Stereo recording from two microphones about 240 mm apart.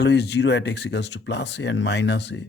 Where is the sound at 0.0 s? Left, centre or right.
Left.